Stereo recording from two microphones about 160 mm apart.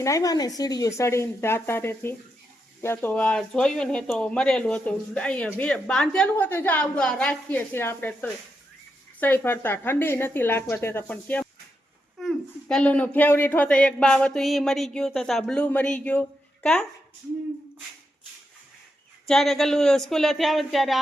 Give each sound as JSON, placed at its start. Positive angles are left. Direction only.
{"t": 0.0, "sound": "a woman's voice", "side_deg": 20}
{"t": 19.3, "sound": "speech", "side_deg": 0}